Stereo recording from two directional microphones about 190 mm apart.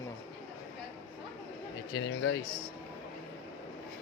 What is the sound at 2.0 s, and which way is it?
Speech, 80° left.